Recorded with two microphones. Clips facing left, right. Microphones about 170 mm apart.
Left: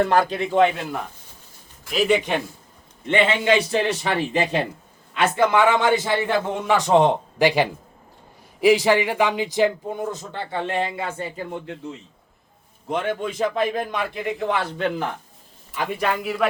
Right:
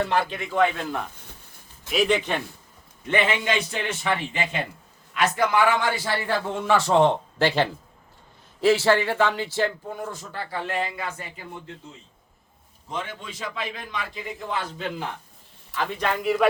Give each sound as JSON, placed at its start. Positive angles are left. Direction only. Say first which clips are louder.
{"t": 0.0, "sound": "a man's voice", "louder": "left 5 dB", "side_deg": 45}
{"t": 2.0, "sound": "a man's voice", "louder": "left 7 dB", "side_deg": 10}
{"t": 3.1, "sound": "a man's voice", "louder": "left 5 dB", "side_deg": 25}
{"t": 11.6, "sound": "a man's voice", "louder": "left 8 dB", "side_deg": 70}
{"t": 15.7, "sound": "a man's voice", "louder": "left 2 dB", "side_deg": 10}
{"t": 16.2, "sound": "speech", "louder": "right 6 dB", "side_deg": 0}